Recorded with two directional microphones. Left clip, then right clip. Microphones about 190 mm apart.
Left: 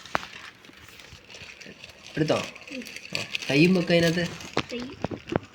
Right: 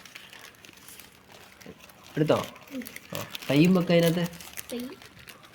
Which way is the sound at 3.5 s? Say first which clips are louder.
Left 1 dB; 45° right (ahead or behind).